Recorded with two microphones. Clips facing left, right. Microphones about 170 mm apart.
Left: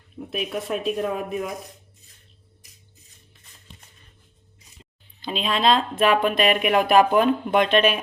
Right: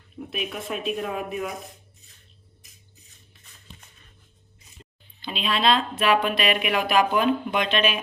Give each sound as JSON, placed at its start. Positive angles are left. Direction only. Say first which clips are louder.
{"t": 0.3, "sound": "speech", "louder": "left 4 dB", "side_deg": 40}
{"t": 5.2, "sound": "speech", "louder": "left 2 dB", "side_deg": 40}